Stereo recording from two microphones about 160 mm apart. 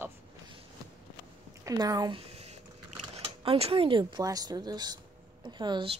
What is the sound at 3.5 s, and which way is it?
A woman's voice, 35° right (ahead or behind).